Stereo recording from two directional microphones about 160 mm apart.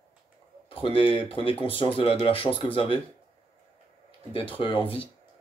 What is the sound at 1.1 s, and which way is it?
Speech, 30° left (ahead or behind).